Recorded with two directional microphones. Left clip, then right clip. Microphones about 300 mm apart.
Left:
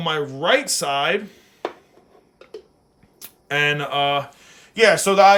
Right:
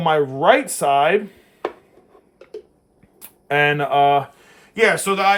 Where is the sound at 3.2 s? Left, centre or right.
Centre.